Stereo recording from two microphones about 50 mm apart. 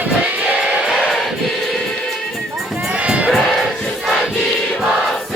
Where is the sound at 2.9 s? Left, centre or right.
Right.